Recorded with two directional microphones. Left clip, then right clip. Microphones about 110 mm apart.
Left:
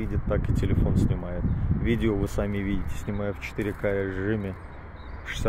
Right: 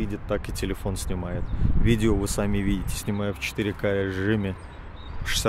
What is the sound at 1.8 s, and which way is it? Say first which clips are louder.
Speech: right 2 dB; 65° right (ahead or behind).